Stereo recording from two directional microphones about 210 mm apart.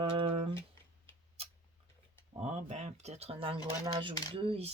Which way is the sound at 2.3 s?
30° right (ahead or behind).